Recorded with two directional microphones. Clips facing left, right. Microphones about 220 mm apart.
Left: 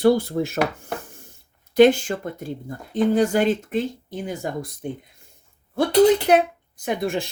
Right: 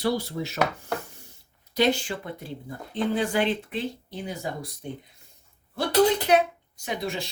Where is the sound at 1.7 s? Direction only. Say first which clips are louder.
Left 9 dB; 50° left (ahead or behind).